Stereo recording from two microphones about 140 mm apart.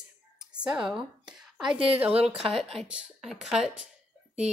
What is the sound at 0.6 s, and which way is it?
A woman's voice, 5° right (ahead or behind).